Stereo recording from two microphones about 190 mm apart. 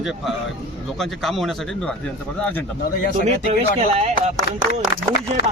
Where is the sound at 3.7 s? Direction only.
35° right (ahead or behind).